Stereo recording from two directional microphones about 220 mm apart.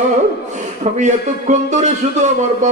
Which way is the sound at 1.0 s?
35° right (ahead or behind).